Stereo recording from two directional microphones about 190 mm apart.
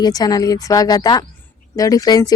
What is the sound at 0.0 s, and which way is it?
Speech, 20° left (ahead or behind).